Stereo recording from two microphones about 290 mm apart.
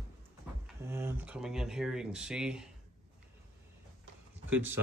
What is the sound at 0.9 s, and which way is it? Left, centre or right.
Speech, centre.